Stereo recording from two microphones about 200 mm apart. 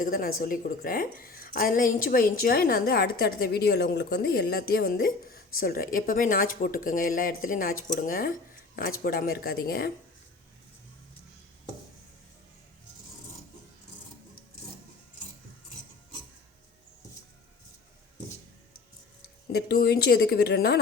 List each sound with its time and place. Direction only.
0.0 s a woman's voice: 45° left (ahead or behind)
19.5 s speech: 55° left (ahead or behind)